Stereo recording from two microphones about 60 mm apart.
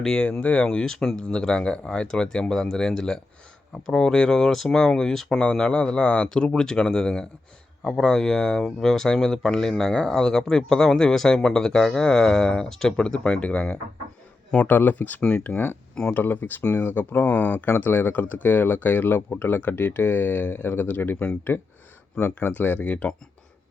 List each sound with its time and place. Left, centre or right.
0.2 s speech: left